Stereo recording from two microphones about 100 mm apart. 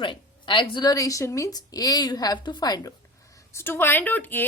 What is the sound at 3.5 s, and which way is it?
Speech, 20° left (ahead or behind).